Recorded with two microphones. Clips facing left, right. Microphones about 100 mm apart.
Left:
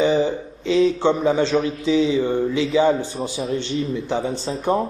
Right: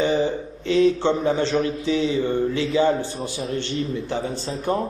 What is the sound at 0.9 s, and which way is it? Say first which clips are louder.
Mantra: left 3 dB; 15° left (ahead or behind).